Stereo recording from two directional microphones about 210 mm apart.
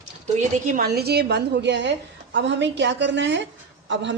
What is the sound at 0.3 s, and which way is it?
A woman's voice, 40° right (ahead or behind).